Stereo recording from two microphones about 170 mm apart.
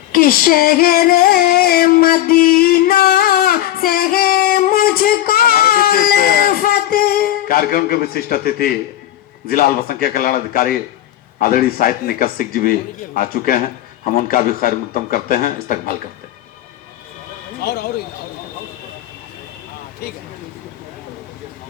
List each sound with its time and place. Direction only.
0.1 s music: 60° left (ahead or behind)
9.5 s a man's voice: 65° left (ahead or behind)
17.6 s speech: 65° left (ahead or behind)